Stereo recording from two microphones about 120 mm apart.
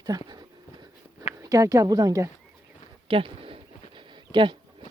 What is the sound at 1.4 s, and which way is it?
Speech, 25° right (ahead or behind).